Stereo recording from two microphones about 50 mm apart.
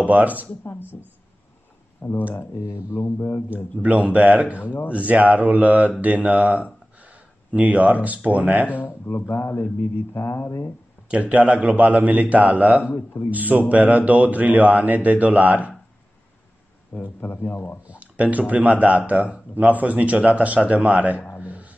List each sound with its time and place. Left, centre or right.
0.0 s speech: right
0.7 s a sound: left
2.0 s mantra: left
2.4 s speech: left
3.8 s a man's voice: right
8.6 s speech: left
9.3 s mantra: left
10.1 s speech: left
11.1 s a man's voice: right
16.9 s speech: left
17.4 s speech: left
17.8 s a man's voice: right
21.4 s a sound: right